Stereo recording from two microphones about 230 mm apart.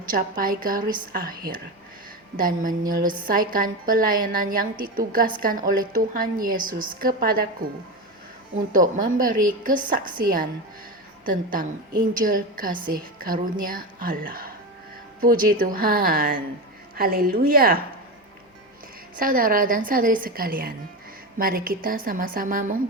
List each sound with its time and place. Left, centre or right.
0.1 s a woman's voice: right
8.7 s a woman's voice: right
19.1 s a woman's voice: right